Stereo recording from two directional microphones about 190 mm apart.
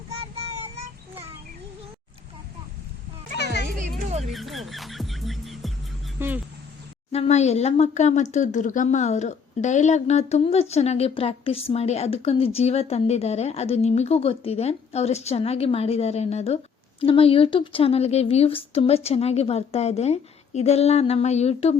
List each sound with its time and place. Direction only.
0.1 s child singing: 30° right (ahead or behind)
3.3 s music: 60° left (ahead or behind)
4.3 s music: centre (ahead or behind)
6.1 s speech: 10° right (ahead or behind)
7.1 s speech: 35° left (ahead or behind)